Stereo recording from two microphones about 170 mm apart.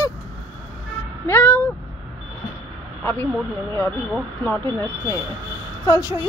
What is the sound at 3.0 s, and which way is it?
Speech, 10° left (ahead or behind).